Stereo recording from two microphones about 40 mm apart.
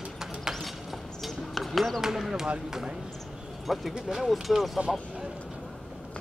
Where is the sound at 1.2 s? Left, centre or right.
Centre.